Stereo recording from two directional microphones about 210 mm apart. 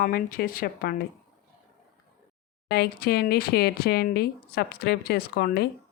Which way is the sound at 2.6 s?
50° left (ahead or behind).